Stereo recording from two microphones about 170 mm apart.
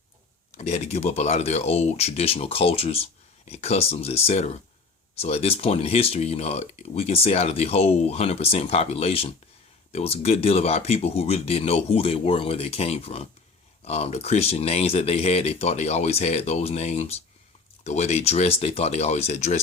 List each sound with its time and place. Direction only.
0.5 s speech: 40° left (ahead or behind)